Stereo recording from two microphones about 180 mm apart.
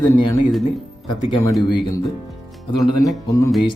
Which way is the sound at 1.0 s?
20° left (ahead or behind).